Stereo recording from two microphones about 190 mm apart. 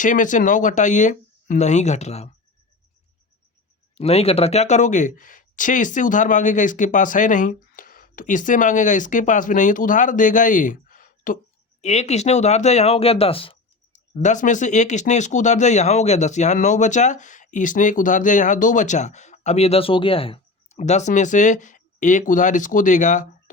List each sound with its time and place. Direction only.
0.0 s speech: 45° left (ahead or behind)
3.9 s speech: 30° left (ahead or behind)
11.8 s speech: 35° left (ahead or behind)
13.9 s speech: 40° left (ahead or behind)